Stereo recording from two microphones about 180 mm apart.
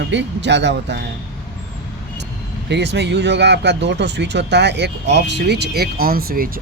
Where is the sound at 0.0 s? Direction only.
80° right.